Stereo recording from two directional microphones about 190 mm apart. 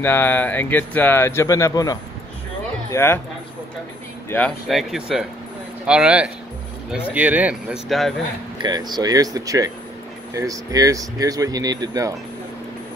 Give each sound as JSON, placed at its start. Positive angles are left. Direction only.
{"t": 0.0, "sound": "speech", "side_deg": 10}
{"t": 4.6, "sound": "speech", "side_deg": 0}
{"t": 8.6, "sound": "speech", "side_deg": -20}